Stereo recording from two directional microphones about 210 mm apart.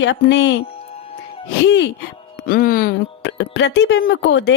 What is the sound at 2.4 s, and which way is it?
A woman's voice, 45° left (ahead or behind).